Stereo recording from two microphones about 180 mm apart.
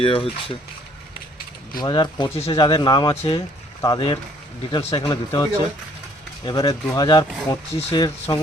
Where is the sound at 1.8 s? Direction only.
25° left (ahead or behind).